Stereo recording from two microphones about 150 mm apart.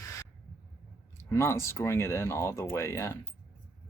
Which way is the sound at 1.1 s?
20° left (ahead or behind).